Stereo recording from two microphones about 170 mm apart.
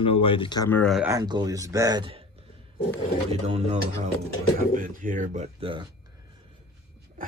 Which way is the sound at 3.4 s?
40° right (ahead or behind).